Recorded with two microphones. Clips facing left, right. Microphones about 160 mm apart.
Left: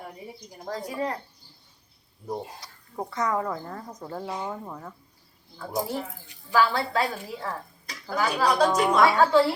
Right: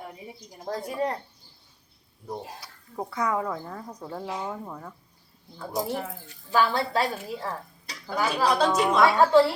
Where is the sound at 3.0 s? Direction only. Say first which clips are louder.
Even; 5° right (ahead or behind).